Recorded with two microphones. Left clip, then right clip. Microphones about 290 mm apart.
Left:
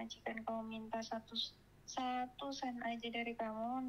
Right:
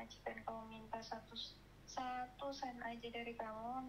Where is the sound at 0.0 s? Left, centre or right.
Left.